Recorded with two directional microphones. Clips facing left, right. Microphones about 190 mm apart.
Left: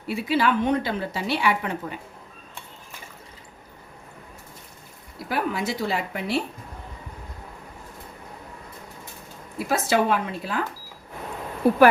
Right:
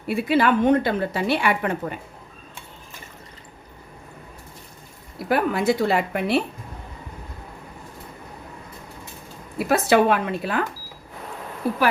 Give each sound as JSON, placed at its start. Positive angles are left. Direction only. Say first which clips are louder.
{"t": 0.1, "sound": "a woman's voice", "louder": "right 3 dB", "side_deg": -55}
{"t": 5.3, "sound": "a woman's voice", "louder": "right 6 dB", "side_deg": -55}
{"t": 9.6, "sound": "a woman's voice", "louder": "right 4 dB", "side_deg": -60}